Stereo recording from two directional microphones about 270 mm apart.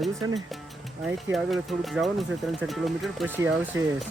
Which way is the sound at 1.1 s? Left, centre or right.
Centre.